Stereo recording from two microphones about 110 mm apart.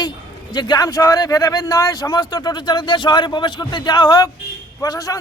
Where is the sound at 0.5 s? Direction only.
40° left (ahead or behind).